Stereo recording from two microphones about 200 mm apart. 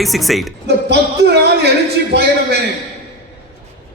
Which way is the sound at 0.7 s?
55° right (ahead or behind).